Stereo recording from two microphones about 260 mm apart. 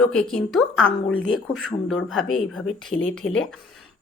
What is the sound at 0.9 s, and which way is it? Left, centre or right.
Speech, left.